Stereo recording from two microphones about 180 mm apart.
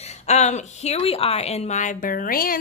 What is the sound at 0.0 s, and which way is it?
A woman's voice, 40° left (ahead or behind).